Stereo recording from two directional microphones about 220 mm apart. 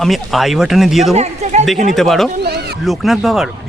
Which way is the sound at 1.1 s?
30° right (ahead or behind).